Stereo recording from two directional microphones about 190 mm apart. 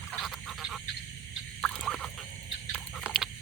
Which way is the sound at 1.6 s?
5° left (ahead or behind).